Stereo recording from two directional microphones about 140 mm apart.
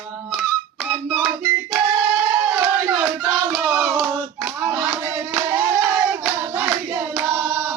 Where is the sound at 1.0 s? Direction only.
Centre (ahead or behind).